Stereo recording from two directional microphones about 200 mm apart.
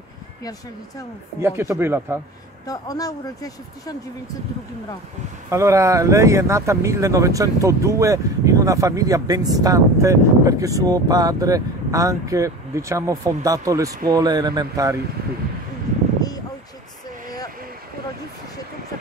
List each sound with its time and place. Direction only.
0.4 s speech: 20° left (ahead or behind)
1.6 s speech: 10° right (ahead or behind)
2.6 s speech: 20° left (ahead or behind)
5.5 s speech: 15° right (ahead or behind)
16.2 s a sound: 20° left (ahead or behind)